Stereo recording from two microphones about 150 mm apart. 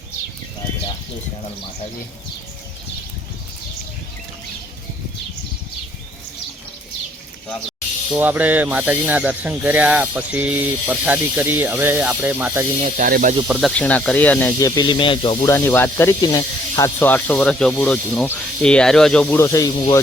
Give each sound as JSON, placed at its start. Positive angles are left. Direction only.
{"t": 8.1, "sound": "speech", "side_deg": -10}
{"t": 13.1, "sound": "speech", "side_deg": -85}
{"t": 13.5, "sound": "speech", "side_deg": 0}
{"t": 14.6, "sound": "speech", "side_deg": 30}
{"t": 15.4, "sound": "speech", "side_deg": 15}
{"t": 19.4, "sound": "speech", "side_deg": 20}